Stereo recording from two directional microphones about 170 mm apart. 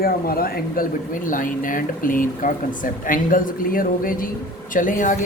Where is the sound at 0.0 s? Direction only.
60° left (ahead or behind).